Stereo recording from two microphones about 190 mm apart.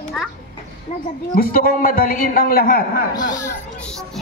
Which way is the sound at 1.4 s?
50° left (ahead or behind).